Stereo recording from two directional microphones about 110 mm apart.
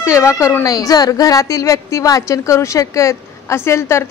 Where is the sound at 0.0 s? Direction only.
25° left (ahead or behind).